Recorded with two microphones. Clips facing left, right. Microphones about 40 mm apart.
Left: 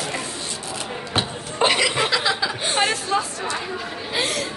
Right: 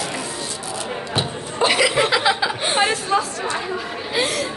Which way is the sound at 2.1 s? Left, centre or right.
Centre.